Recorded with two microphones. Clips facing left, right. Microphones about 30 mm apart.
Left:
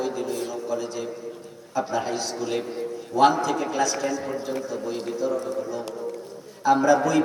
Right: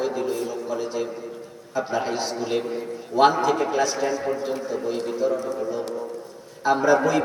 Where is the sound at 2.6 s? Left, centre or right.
Centre.